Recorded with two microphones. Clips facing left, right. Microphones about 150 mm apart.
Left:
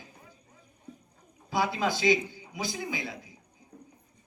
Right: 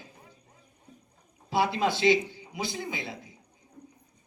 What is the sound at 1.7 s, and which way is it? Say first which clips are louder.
A man's voice: right 2 dB; 25° right (ahead or behind).